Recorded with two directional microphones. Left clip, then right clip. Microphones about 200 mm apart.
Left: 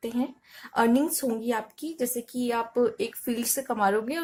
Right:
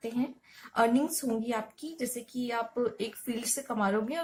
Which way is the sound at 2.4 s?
45° left (ahead or behind).